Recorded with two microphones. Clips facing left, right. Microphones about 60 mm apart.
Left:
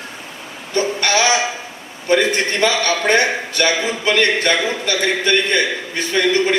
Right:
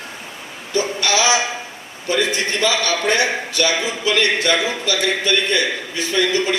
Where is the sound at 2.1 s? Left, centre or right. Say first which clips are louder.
Left 4 dB; left.